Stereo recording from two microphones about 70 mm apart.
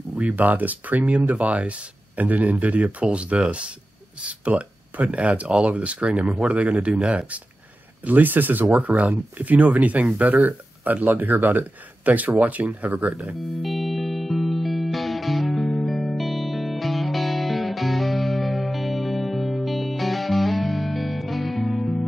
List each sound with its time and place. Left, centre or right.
0.1 s speech: right
13.6 s music: centre